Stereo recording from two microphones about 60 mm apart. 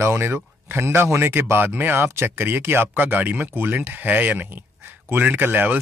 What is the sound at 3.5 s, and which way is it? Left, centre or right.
Speech, right.